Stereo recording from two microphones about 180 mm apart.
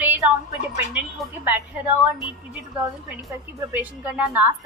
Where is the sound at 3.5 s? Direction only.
10° right (ahead or behind).